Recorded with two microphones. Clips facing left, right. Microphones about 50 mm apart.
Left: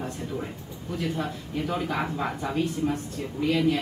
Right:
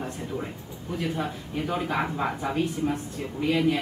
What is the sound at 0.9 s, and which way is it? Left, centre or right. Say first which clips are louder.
Speech: even; centre.